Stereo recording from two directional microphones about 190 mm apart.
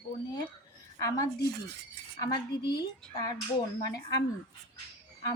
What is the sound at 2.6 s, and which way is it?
Speech, 60° left (ahead or behind).